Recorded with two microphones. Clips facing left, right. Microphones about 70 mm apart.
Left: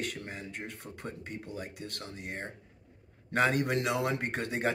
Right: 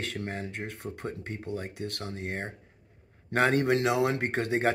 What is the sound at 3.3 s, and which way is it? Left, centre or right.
Speech, right.